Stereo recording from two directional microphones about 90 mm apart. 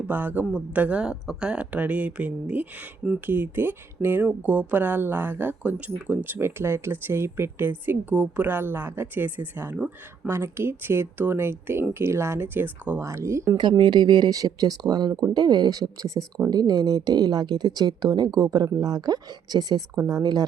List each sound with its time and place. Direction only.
0.1 s speech: 20° right (ahead or behind)
13.1 s speech: 35° right (ahead or behind)
13.6 s speech: 55° right (ahead or behind)